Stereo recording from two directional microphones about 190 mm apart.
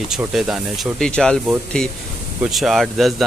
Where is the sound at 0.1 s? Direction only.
Centre (ahead or behind).